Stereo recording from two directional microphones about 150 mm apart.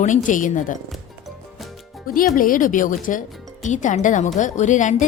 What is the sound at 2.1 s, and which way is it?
A woman's voice, 70° left (ahead or behind).